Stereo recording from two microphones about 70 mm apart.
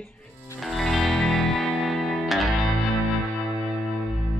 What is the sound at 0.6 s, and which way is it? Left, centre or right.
Music, centre.